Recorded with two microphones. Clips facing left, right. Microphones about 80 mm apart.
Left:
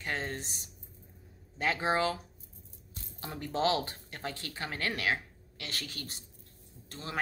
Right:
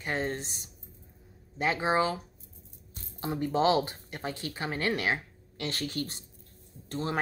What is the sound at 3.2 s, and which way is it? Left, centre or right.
A woman's voice, right.